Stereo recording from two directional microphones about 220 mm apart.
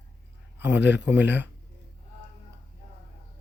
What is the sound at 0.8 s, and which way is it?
Speech, 50° left (ahead or behind).